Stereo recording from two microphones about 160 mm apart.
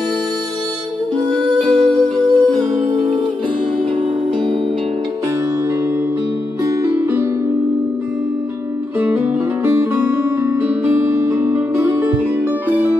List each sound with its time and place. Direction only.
1.7 s music: 5° left (ahead or behind)
2.9 s music: 30° right (ahead or behind)
6.6 s music: 15° right (ahead or behind)
9.0 s music: 15° right (ahead or behind)